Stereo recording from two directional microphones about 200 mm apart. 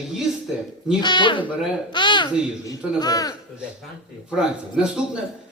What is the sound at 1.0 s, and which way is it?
Speech, 25° left (ahead or behind).